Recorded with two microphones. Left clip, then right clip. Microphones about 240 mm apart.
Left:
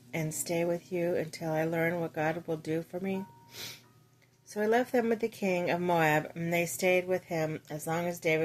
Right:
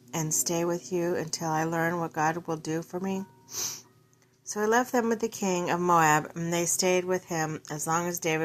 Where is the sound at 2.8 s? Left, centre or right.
Centre.